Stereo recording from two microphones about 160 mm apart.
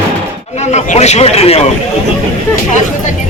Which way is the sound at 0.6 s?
45° left (ahead or behind).